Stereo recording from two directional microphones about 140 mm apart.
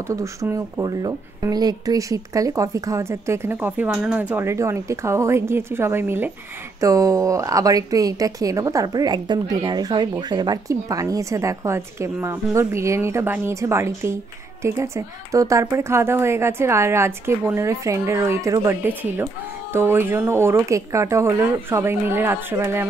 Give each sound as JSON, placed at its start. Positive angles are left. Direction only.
{"t": 0.0, "sound": "a woman's voice", "side_deg": -20}